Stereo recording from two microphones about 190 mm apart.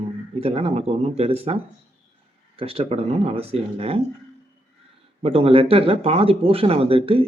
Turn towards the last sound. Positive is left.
turn(degrees=-30)  # may be behind; listen again after turning